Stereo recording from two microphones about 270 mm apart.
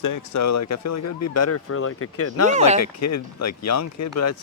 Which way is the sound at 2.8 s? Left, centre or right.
Left.